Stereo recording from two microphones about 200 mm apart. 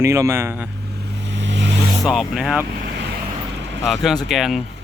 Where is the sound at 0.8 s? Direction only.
55° right (ahead or behind).